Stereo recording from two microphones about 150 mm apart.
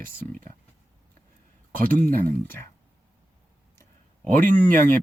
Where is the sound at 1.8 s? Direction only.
10° left (ahead or behind).